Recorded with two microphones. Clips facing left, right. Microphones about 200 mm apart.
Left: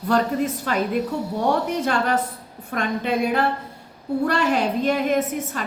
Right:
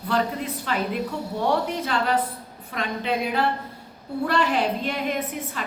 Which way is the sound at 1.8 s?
45° left (ahead or behind).